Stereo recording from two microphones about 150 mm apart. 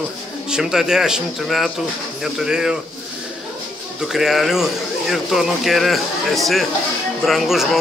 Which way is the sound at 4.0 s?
Centre (ahead or behind).